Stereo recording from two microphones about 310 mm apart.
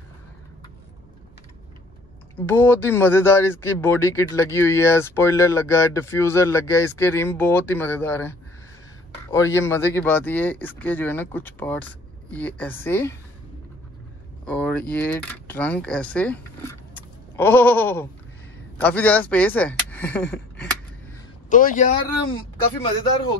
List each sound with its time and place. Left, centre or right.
2.4 s speech: centre
14.4 s speech: centre
17.4 s speech: centre
21.5 s a man's voice: left